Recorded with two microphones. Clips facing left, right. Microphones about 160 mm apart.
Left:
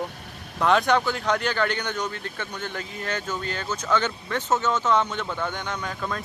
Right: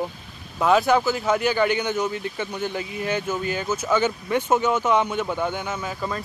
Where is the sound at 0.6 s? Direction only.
5° right (ahead or behind).